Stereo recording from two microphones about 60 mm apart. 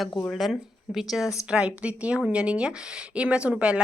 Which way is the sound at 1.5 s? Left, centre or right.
Centre.